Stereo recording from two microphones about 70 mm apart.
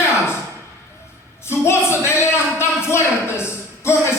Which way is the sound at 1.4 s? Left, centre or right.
Left.